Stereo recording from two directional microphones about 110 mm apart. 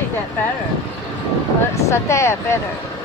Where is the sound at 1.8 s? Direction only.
25° left (ahead or behind).